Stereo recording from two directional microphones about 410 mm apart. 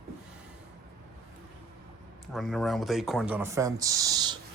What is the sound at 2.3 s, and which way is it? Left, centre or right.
Speech, centre.